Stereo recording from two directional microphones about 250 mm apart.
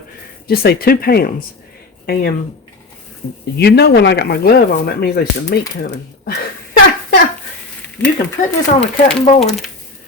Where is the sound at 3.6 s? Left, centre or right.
Left.